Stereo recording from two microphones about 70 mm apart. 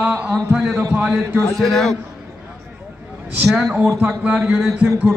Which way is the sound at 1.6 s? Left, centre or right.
Centre.